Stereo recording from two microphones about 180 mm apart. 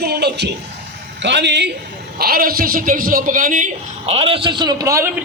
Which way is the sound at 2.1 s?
55° right (ahead or behind).